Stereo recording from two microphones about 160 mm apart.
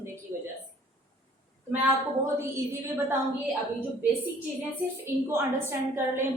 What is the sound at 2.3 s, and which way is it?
Speech, 15° right (ahead or behind).